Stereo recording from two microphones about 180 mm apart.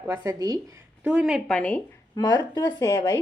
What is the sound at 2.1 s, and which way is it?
Speech, 20° left (ahead or behind).